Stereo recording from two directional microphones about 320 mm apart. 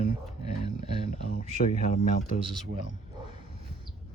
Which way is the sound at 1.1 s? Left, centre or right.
Left.